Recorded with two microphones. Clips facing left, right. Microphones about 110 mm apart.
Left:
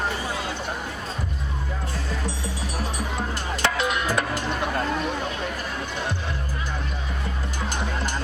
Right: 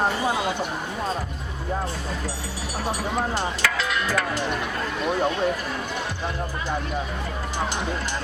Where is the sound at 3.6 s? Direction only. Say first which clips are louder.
Left 6 dB; 20° left (ahead or behind).